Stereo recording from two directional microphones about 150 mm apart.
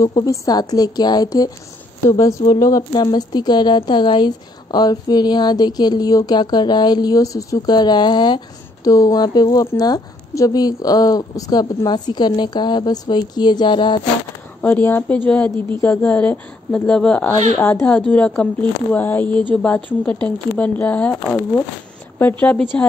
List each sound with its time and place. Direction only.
0.0 s a woman's voice: 25° left (ahead or behind)
14.6 s speech: 15° left (ahead or behind)